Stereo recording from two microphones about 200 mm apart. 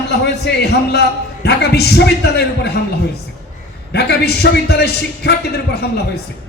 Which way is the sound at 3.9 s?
55° left (ahead or behind).